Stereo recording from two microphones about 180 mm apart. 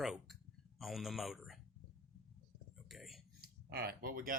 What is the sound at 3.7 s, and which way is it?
Speech, 60° right (ahead or behind).